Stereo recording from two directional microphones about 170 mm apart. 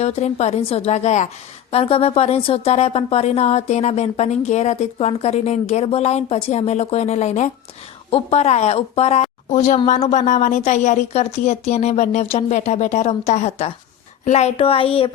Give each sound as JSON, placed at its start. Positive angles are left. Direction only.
{"t": 0.0, "sound": "speech", "side_deg": 40}